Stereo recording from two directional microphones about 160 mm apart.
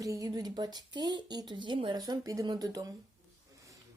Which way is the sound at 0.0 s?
20° right (ahead or behind).